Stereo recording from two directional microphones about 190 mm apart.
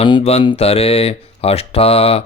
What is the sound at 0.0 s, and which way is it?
Speech, 30° left (ahead or behind).